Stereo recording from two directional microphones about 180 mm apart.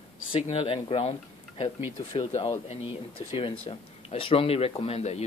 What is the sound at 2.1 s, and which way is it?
Speech, 30° left (ahead or behind).